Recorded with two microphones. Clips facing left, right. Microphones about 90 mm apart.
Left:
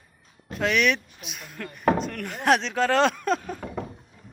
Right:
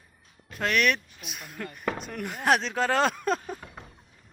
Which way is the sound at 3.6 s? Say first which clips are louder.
Left 12 dB; 65° left (ahead or behind).